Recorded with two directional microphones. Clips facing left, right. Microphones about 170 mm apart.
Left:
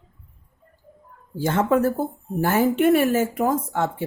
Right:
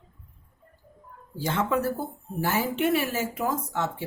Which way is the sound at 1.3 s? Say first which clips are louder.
Left 6 dB; 50° left (ahead or behind).